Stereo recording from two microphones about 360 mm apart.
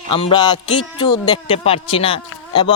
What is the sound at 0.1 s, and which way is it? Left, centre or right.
A man's voice, centre.